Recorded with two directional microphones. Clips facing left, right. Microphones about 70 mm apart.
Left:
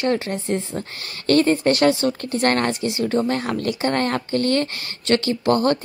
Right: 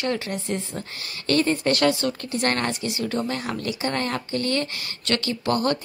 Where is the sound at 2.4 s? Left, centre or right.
Left.